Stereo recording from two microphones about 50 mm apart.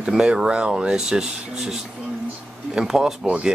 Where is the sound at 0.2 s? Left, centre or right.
Centre.